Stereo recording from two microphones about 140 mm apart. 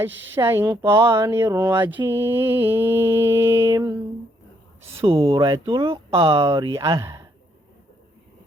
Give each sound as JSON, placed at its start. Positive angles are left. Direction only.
{"t": 0.0, "sound": "speech", "side_deg": -20}
{"t": 2.0, "sound": "mantra", "side_deg": -15}
{"t": 4.9, "sound": "speech", "side_deg": -40}
{"t": 6.4, "sound": "speech", "side_deg": -25}